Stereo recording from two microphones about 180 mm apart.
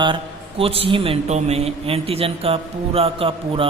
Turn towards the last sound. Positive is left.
turn(degrees=-30)  # may be behind; listen again after turning